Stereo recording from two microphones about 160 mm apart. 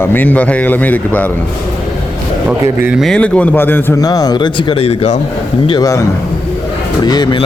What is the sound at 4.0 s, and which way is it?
Speech, 25° left (ahead or behind).